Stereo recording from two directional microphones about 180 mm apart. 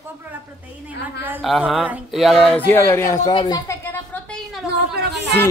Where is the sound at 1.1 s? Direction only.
10° right (ahead or behind).